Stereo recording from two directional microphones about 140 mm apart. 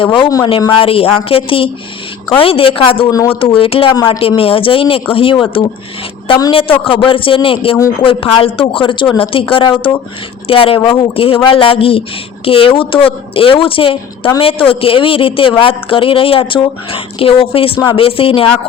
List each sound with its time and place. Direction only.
0.0 s a woman's voice: 40° left (ahead or behind)
0.3 s speech: 25° left (ahead or behind)
0.7 s a woman's voice: 40° left (ahead or behind)
3.1 s speech: 25° left (ahead or behind)
3.4 s a woman's voice: 40° left (ahead or behind)
3.9 s speech: 30° left (ahead or behind)
4.2 s a woman's voice: 40° left (ahead or behind)
6.5 s a woman's voice: 40° left (ahead or behind)